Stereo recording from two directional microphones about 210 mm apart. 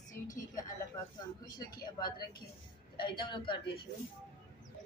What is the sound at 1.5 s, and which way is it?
Speech, 20° left (ahead or behind).